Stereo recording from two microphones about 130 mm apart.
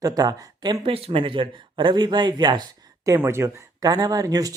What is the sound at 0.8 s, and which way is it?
Speech, 45° right (ahead or behind).